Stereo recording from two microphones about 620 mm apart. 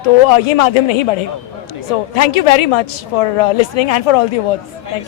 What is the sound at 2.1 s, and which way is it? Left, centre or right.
Speech, left.